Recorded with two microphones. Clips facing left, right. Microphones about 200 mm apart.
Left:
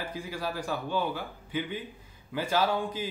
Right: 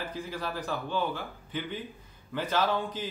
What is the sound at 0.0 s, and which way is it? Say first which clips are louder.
Speech: left 1 dB; 10° left (ahead or behind).